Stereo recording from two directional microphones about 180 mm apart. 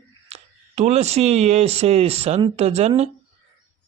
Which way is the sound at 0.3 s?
35° right (ahead or behind).